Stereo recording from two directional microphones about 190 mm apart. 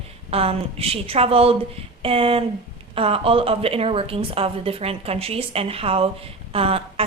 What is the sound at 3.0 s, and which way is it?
A woman's voice, 30° right (ahead or behind).